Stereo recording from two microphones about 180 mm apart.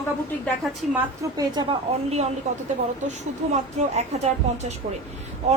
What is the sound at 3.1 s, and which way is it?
Speech, 40° right (ahead or behind).